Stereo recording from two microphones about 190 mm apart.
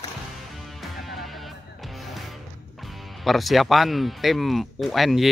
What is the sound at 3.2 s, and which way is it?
Speech, centre (ahead or behind).